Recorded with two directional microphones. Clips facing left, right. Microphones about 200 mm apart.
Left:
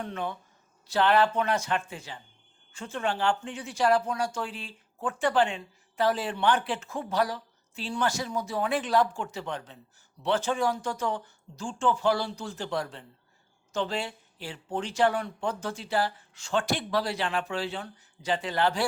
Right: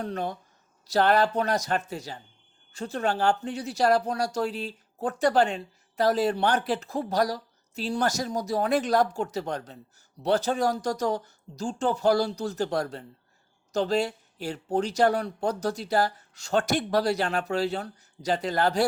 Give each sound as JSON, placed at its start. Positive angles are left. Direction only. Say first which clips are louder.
{"t": 0.0, "sound": "speech", "louder": "right 3 dB", "side_deg": -40}